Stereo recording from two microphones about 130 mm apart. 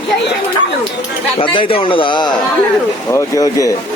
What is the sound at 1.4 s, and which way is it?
Speech, 45° left (ahead or behind).